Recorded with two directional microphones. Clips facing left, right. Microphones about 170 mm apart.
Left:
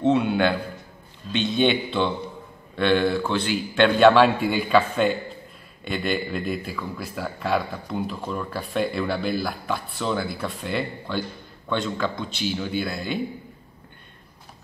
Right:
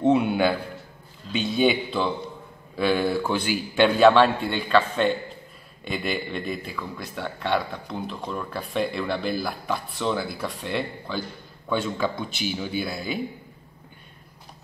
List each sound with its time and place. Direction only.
0.0 s a man's voice: 15° right (ahead or behind)